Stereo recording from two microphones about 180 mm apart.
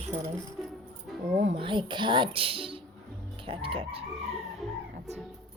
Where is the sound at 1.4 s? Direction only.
30° right (ahead or behind).